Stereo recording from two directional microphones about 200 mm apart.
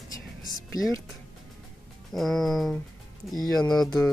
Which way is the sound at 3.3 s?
20° left (ahead or behind).